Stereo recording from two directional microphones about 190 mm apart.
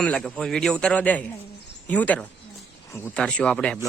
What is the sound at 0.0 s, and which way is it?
Speech, 5° left (ahead or behind).